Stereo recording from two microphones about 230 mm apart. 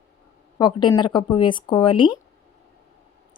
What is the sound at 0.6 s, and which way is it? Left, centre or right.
A woman's voice, centre.